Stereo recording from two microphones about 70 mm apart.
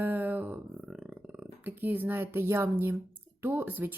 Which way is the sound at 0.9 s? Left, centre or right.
Centre.